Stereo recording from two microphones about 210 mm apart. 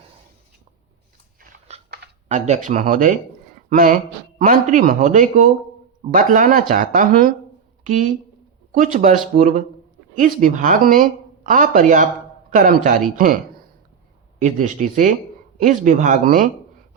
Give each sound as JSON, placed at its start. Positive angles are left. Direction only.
{"t": 1.4, "sound": "biting", "side_deg": -30}
{"t": 2.3, "sound": "a woman's voice", "side_deg": -35}
{"t": 8.8, "sound": "a woman's voice", "side_deg": -40}